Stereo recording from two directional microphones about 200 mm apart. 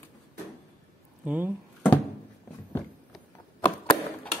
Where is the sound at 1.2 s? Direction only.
10° right (ahead or behind).